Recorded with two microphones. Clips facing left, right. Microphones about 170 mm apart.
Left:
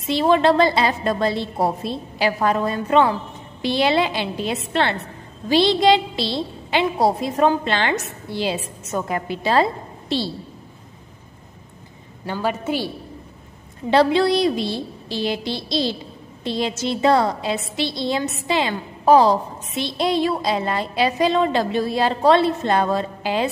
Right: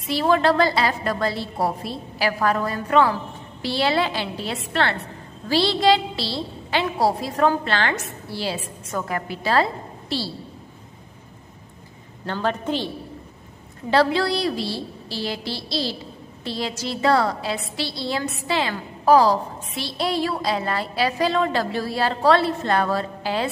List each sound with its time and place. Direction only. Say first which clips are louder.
0.0 s a woman's voice: left 3 dB; 20° left (ahead or behind)
12.3 s a woman's voice: left 1 dB; 10° left (ahead or behind)
13.8 s a woman's voice: left 3 dB; 20° left (ahead or behind)